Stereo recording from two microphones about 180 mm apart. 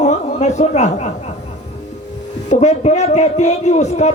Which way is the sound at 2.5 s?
40° left (ahead or behind).